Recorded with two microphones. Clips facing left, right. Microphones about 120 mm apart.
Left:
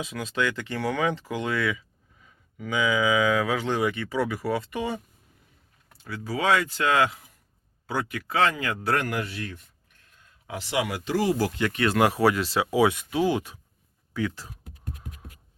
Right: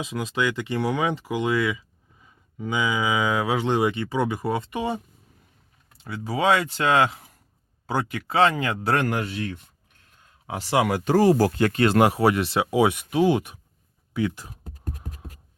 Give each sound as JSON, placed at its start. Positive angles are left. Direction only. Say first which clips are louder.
{"t": 0.0, "sound": "speech", "louder": "right 2 dB", "side_deg": -15}
{"t": 6.1, "sound": "speech", "louder": "right 3 dB", "side_deg": -25}
{"t": 10.4, "sound": "speech", "louder": "right 5 dB", "side_deg": -40}
{"t": 14.6, "sound": "scratch", "louder": "right 6 dB", "side_deg": -40}